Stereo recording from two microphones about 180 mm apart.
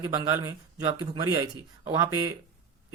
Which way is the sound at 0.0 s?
20° right (ahead or behind).